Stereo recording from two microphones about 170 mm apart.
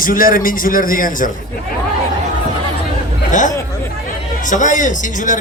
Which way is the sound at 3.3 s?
50° left (ahead or behind).